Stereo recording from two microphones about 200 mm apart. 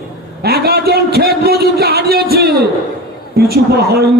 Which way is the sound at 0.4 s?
50° right (ahead or behind).